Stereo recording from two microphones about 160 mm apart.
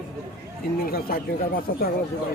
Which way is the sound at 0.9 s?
70° left (ahead or behind).